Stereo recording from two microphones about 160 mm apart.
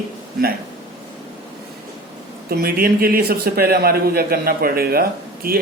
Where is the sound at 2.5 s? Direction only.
75° right (ahead or behind).